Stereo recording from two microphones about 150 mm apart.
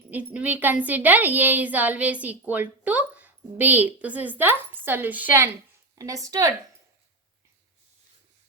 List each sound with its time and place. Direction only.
0.3 s a woman's voice: 10° right (ahead or behind)